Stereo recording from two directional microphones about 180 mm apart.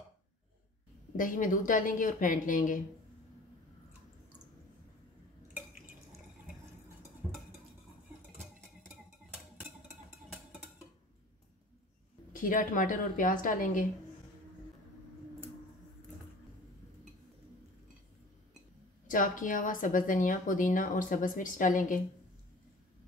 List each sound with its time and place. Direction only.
1.1 s a woman's voice: 50° left (ahead or behind)
12.3 s a woman's voice: 50° left (ahead or behind)
19.0 s a woman's voice: 45° left (ahead or behind)